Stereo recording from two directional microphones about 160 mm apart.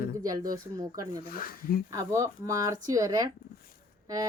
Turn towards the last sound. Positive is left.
turn(degrees=-20)  # may be behind; listen again after turning